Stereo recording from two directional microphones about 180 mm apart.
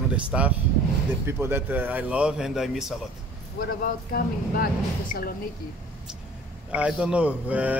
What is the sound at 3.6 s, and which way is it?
Speech, 50° left (ahead or behind).